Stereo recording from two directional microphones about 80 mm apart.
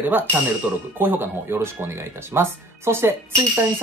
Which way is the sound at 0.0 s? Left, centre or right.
Right.